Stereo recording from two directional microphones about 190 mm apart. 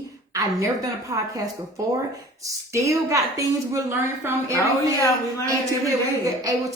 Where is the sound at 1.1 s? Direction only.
20° right (ahead or behind).